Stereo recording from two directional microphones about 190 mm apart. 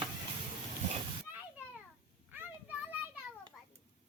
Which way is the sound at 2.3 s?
10° right (ahead or behind).